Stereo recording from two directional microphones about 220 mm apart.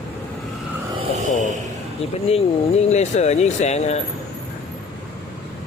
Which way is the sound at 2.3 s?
30° left (ahead or behind).